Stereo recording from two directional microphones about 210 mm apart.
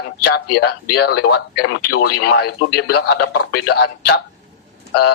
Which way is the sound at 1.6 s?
90° left.